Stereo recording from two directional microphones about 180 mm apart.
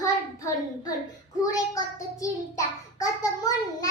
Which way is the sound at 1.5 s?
20° left (ahead or behind).